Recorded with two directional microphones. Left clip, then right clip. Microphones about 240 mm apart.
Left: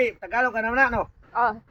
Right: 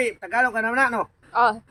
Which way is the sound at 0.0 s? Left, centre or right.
Centre.